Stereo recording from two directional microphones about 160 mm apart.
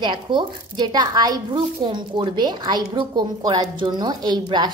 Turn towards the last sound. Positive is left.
turn(degrees=-25)  # may be behind; listen again after turning